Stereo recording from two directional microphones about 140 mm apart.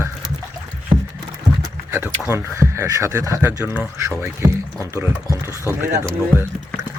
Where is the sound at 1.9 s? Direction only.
20° right (ahead or behind).